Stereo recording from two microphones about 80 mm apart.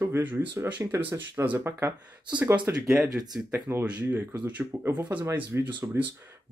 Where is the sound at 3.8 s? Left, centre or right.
Centre.